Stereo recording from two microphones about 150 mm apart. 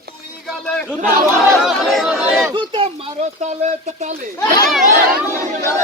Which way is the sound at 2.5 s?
30° right (ahead or behind).